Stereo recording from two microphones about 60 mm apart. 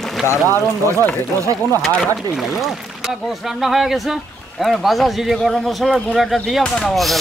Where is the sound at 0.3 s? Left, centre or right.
Left.